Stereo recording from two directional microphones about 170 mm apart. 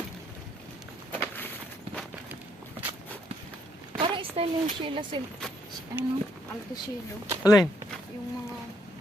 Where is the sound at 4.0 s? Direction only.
30° right (ahead or behind).